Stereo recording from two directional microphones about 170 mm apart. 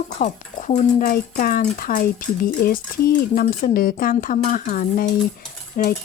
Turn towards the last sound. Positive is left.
turn(degrees=60)  # may be behind; listen again after turning